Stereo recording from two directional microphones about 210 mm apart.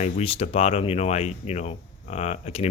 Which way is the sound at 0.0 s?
30° left (ahead or behind).